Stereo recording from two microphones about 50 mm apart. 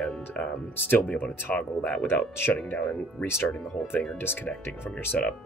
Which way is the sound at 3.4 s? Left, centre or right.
Left.